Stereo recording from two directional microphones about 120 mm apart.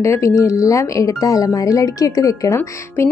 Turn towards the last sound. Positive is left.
turn(degrees=25)  # may be behind; listen again after turning